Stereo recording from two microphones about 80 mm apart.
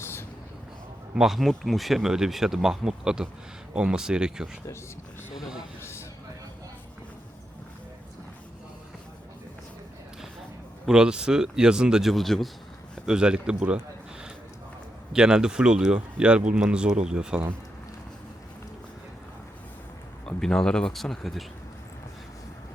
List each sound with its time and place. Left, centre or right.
0.0 s a sound: left
1.1 s speech: centre
10.8 s speech: centre
13.1 s speech: centre
15.1 s speech: centre
20.2 s speech: centre